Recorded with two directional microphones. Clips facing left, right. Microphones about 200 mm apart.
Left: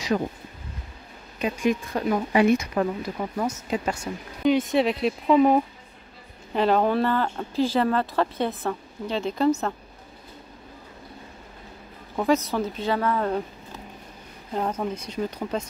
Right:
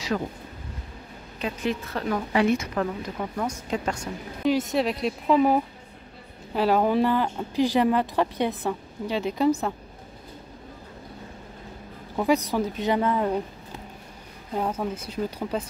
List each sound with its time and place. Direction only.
0.1 s speech: 20° left (ahead or behind)
1.4 s speech: 15° left (ahead or behind); by 9.8 s 10° right (ahead or behind)
12.3 s speech: 15° right (ahead or behind)
14.5 s speech: 5° right (ahead or behind)